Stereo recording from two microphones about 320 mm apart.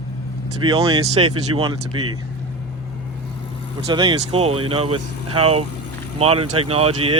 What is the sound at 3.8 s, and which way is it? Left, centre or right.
Speech, centre.